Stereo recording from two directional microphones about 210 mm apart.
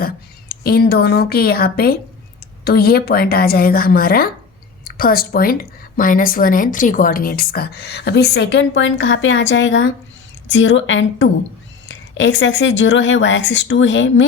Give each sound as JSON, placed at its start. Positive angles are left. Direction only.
{"t": 0.0, "sound": "a woman's voice", "side_deg": 45}